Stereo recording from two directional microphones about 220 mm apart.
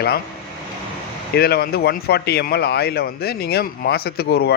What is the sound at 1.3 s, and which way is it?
Speech, 45° left (ahead or behind).